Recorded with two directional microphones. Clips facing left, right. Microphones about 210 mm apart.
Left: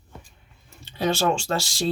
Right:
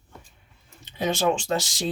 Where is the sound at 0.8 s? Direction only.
15° right (ahead or behind).